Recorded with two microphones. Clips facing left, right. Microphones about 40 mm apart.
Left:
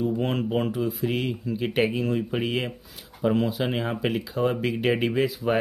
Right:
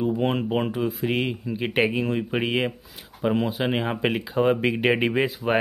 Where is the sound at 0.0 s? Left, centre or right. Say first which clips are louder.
Right 2 dB; right.